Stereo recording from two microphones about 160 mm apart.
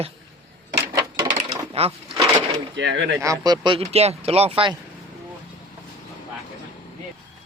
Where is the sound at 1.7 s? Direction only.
40° right (ahead or behind).